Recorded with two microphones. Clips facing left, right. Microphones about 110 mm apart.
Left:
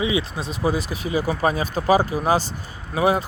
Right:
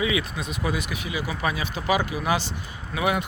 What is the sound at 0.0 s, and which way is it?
Speech, 30° left (ahead or behind).